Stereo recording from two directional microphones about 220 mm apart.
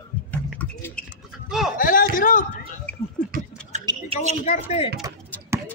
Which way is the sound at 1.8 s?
40° left (ahead or behind).